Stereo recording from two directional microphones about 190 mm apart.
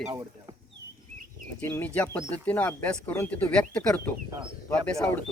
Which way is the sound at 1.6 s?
10° left (ahead or behind).